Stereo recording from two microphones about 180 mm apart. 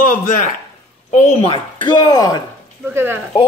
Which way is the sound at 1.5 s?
25° left (ahead or behind).